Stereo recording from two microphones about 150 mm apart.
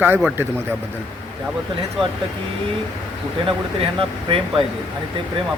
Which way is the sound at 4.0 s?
35° right (ahead or behind).